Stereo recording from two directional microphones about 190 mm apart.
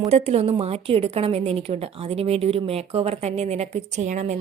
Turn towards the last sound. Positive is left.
turn(degrees=-40)  # may be behind; listen again after turning